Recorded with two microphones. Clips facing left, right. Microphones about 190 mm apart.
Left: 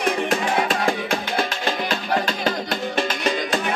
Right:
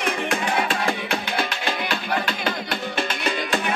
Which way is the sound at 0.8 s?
40° left (ahead or behind).